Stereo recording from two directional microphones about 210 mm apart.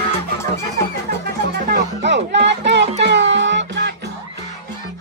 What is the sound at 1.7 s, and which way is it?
Music, 55° right (ahead or behind).